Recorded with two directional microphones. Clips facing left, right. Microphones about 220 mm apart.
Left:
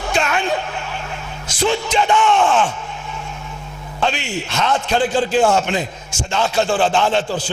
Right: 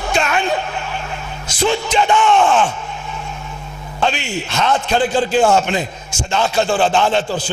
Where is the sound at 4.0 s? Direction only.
15° right (ahead or behind).